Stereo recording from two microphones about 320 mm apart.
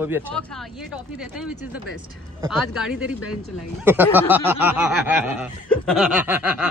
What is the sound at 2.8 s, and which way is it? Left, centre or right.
Speech, centre.